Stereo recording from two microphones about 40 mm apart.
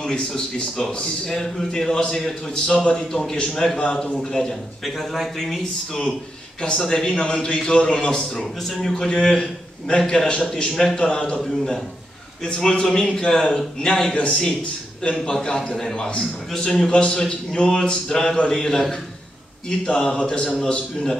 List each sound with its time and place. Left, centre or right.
1.2 s a man's voice: centre
8.4 s a man's voice: centre